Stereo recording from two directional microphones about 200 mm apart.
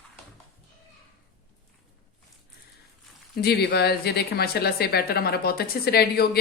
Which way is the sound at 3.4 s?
55° left (ahead or behind).